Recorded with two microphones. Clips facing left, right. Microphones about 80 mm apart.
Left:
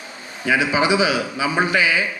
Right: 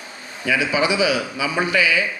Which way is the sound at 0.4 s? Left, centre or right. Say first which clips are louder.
Left 2 dB; left.